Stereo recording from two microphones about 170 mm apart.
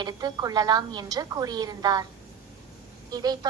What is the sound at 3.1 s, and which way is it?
Speech, 25° right (ahead or behind).